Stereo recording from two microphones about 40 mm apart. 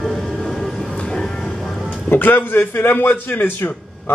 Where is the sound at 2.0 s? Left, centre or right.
Left.